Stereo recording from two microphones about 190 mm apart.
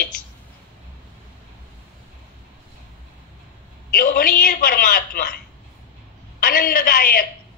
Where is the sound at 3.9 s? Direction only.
50° left (ahead or behind).